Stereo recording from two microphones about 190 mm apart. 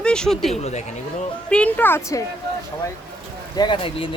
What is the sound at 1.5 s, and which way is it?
Speech, 5° left (ahead or behind).